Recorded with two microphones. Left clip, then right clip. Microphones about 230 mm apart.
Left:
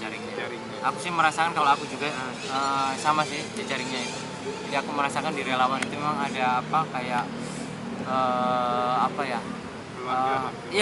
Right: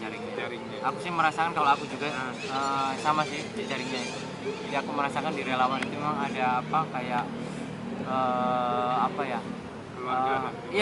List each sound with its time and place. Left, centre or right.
1.0 s speech: centre
4.7 s speech: centre
8.2 s mantra: right
10.1 s speech: centre